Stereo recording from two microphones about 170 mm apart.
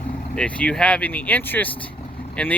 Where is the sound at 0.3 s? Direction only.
5° left (ahead or behind).